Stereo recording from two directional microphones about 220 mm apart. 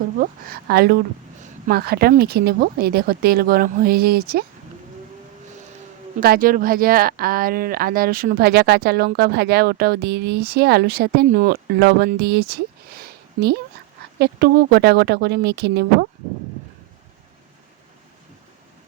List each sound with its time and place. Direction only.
0.2 s a woman's voice: 40° right (ahead or behind)
6.1 s a woman's voice: 40° right (ahead or behind)